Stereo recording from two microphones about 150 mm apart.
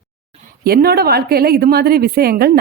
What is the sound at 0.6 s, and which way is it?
A woman's voice, 90° right.